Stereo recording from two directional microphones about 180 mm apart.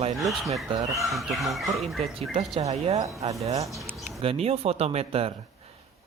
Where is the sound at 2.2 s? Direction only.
35° right (ahead or behind).